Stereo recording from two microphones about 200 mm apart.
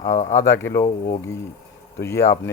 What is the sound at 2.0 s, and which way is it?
Speech, 15° left (ahead or behind).